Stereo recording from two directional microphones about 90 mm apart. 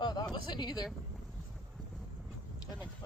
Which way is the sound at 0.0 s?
50° left (ahead or behind).